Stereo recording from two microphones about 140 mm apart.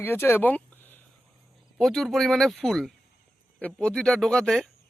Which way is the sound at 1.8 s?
Centre (ahead or behind).